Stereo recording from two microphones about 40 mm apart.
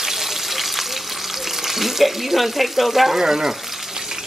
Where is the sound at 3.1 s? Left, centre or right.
Centre.